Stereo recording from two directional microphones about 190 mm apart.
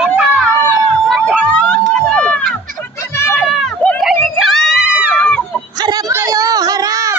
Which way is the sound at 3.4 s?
Centre (ahead or behind).